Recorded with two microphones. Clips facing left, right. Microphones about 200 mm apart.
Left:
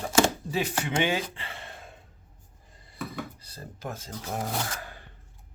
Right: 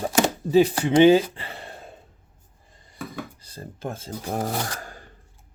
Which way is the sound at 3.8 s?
30° right (ahead or behind).